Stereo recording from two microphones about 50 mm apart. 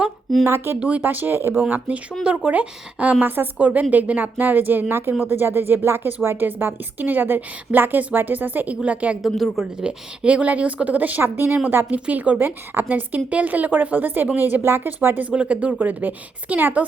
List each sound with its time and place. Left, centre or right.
0.4 s speech: right
0.8 s a woman's voice: right
2.2 s a woman's voice: right
4.9 s a woman's voice: right
9.2 s a woman's voice: centre
9.8 s a woman's voice: right
11.2 s speech: right
11.9 s a woman's voice: right
12.4 s a woman's voice: right
15.3 s a woman's voice: right